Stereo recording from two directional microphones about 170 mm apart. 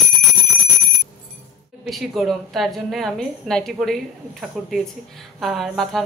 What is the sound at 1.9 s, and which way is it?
A woman's voice, centre (ahead or behind).